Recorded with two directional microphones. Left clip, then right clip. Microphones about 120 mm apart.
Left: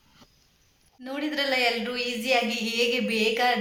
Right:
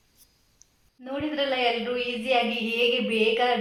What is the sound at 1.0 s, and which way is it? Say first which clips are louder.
A man's voice: even; 40° left (ahead or behind).